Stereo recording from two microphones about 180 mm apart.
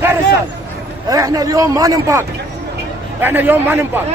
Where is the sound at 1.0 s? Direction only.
20° right (ahead or behind).